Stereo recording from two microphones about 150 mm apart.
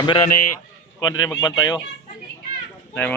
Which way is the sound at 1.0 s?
25° left (ahead or behind).